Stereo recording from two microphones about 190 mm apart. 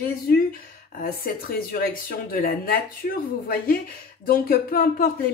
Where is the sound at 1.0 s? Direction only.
50° left (ahead or behind).